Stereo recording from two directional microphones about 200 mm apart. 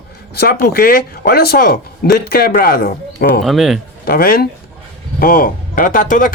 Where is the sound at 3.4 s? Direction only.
Centre (ahead or behind).